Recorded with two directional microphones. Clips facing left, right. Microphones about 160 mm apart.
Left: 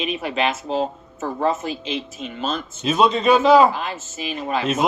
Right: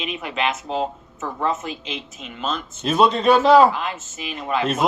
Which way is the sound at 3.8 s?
30° left (ahead or behind).